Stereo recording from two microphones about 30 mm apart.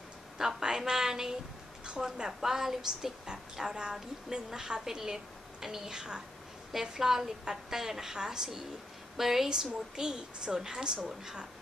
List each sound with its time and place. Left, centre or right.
0.4 s a sound: centre
2.2 s a woman's voice: centre
9.1 s a woman's voice: centre
9.5 s a woman's voice: centre